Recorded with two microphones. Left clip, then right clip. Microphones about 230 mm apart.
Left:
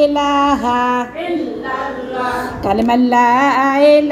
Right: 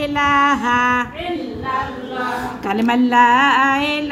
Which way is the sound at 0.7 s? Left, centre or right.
Centre.